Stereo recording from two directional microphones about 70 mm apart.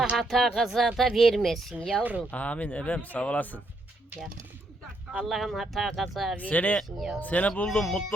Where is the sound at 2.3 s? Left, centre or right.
Centre.